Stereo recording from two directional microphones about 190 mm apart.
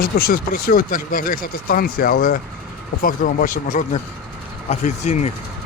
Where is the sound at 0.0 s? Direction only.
50° left (ahead or behind).